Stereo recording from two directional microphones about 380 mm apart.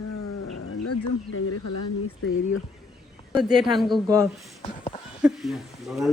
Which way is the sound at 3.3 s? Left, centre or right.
Centre.